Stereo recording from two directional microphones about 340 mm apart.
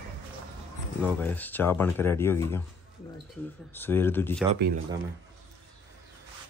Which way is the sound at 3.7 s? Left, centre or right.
Centre.